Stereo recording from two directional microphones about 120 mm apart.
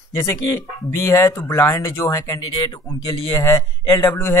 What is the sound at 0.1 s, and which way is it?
Speech, 20° left (ahead or behind).